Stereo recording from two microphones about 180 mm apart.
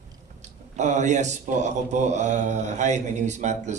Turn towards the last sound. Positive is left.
turn(degrees=-40)  # may be behind; listen again after turning